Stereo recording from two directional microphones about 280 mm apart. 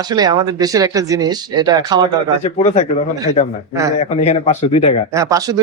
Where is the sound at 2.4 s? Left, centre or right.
Left.